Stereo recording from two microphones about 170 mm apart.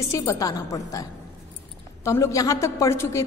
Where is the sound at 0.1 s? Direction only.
20° left (ahead or behind).